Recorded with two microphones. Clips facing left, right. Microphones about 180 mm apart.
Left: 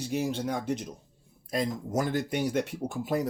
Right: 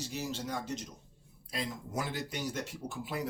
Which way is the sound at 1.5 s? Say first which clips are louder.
Left 8 dB; 45° left (ahead or behind).